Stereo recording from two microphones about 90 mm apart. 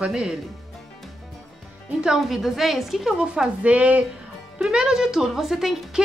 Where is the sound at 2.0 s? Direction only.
5° right (ahead or behind).